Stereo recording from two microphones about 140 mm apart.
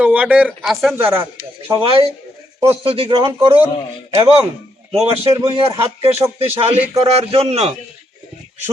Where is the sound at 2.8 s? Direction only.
40° right (ahead or behind).